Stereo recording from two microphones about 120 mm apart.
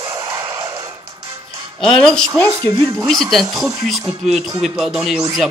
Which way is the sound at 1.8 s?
5° left (ahead or behind).